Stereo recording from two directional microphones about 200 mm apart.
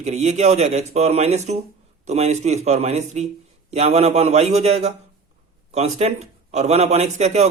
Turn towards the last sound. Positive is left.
turn(degrees=-35)  # may be behind; listen again after turning